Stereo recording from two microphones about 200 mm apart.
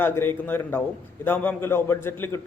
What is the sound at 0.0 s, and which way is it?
A man's voice, 10° left (ahead or behind).